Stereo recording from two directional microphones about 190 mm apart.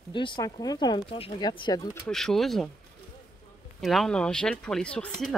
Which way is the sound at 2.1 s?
Centre (ahead or behind).